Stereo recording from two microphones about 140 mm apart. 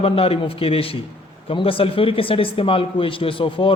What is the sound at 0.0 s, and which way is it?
A man's voice, 45° left (ahead or behind).